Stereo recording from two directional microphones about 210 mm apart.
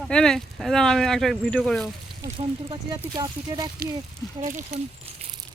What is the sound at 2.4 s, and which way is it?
Speech, 20° right (ahead or behind).